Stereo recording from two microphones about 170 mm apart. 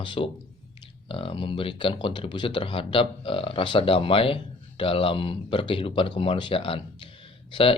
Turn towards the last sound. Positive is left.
turn(degrees=30)  # may be behind; listen again after turning